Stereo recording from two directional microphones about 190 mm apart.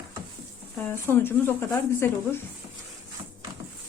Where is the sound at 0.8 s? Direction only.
10° left (ahead or behind).